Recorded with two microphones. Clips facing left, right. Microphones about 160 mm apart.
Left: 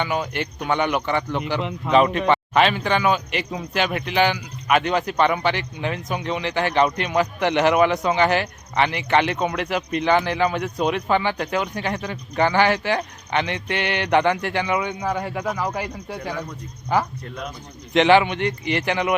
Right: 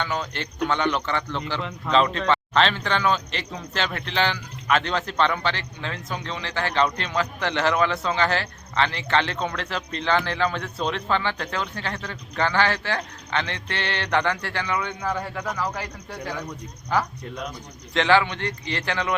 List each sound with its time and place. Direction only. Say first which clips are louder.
0.0 s speech: left 4 dB; 10° left (ahead or behind)
17.9 s speech: left 5 dB; 20° left (ahead or behind)